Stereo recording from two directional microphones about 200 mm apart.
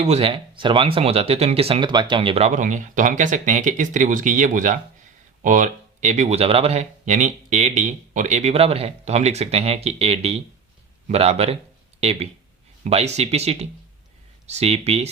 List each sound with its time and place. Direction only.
0.0 s speech: 30° right (ahead or behind)